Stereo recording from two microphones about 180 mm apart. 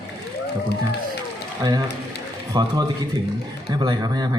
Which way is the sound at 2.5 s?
20° right (ahead or behind).